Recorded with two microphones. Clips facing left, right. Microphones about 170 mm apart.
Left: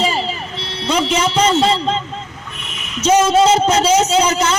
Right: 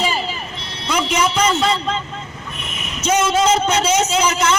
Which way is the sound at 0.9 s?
30° left (ahead or behind).